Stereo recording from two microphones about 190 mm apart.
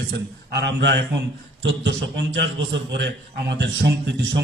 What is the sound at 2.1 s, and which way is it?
Speech, 75° right (ahead or behind).